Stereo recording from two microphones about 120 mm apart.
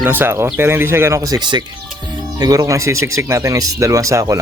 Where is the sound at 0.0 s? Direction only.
20° right (ahead or behind).